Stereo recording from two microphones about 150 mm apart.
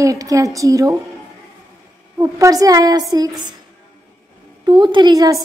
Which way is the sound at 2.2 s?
20° right (ahead or behind).